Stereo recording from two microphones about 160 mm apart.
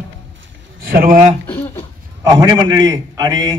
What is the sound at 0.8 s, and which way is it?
Speech, 65° right (ahead or behind).